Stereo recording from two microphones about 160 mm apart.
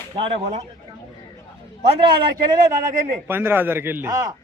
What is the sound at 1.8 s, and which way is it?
Speech, 30° right (ahead or behind).